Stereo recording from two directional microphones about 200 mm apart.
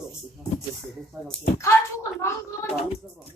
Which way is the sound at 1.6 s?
15° left (ahead or behind).